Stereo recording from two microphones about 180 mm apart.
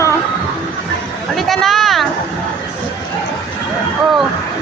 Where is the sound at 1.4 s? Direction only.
Centre (ahead or behind).